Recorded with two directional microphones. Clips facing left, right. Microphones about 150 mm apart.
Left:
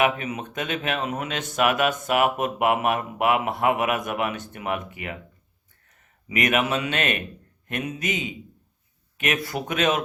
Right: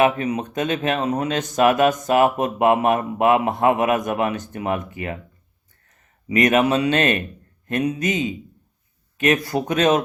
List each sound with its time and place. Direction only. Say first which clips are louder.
0.0 s speech: right 5 dB; 35° right (ahead or behind)
6.2 s speech: right 6 dB; 35° right (ahead or behind)